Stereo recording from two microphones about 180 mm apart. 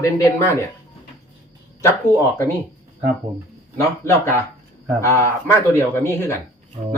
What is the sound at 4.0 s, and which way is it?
Speech, 15° left (ahead or behind).